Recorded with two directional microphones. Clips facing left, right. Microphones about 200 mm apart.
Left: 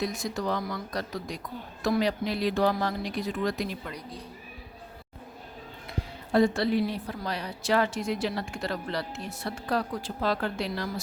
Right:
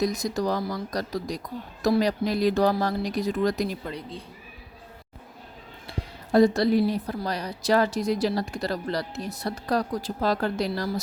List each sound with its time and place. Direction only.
0.0 s a woman's voice: 40° right (ahead or behind)
6.3 s a woman's voice: 40° right (ahead or behind)